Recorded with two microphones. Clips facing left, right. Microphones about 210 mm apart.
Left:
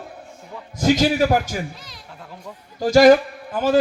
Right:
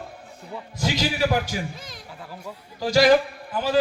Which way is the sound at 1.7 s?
50° right (ahead or behind).